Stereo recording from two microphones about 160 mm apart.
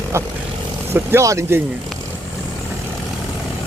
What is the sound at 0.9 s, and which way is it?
Speech, 15° right (ahead or behind).